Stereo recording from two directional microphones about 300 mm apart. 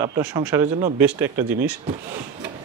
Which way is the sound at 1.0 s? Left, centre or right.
Centre.